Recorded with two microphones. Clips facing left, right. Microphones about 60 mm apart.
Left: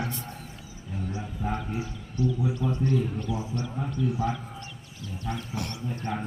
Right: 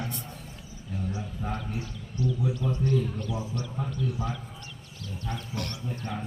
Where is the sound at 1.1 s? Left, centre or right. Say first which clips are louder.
Left 3 dB; centre.